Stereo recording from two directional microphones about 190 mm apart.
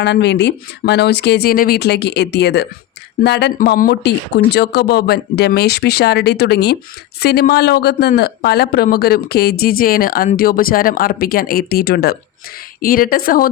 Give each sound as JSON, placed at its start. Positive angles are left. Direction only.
{"t": 0.0, "sound": "speech", "side_deg": 65}